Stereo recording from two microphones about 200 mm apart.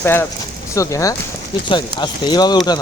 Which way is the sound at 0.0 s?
10° left (ahead or behind).